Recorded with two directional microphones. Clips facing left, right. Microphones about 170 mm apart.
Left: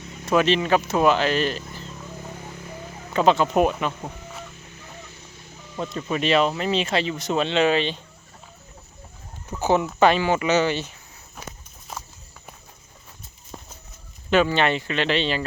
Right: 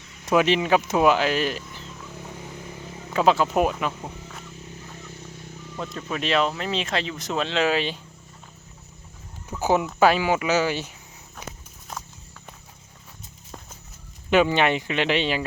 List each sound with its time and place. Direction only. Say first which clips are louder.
0.3 s speech: even; 15° right (ahead or behind)
3.1 s speech: left 1 dB; 5° right (ahead or behind)
5.0 s vehicle: right 5 dB; 50° right (ahead or behind)
5.7 s speech: left 4 dB; centre (ahead or behind)
9.5 s speech: left 1 dB; 10° right (ahead or behind)
11.4 s walk: right 1 dB; 15° right (ahead or behind)
14.3 s speech: even; 15° right (ahead or behind)